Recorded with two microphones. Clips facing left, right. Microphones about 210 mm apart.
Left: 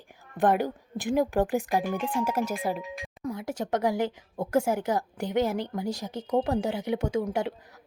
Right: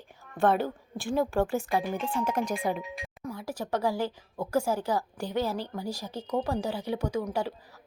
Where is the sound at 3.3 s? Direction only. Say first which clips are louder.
Left 3 dB; 20° left (ahead or behind).